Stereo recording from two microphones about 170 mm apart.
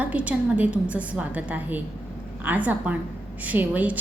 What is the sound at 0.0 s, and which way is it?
A woman's voice, 10° right (ahead or behind).